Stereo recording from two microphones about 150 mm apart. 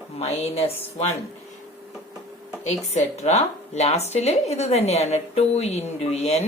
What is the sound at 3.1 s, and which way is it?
Speech, 45° left (ahead or behind).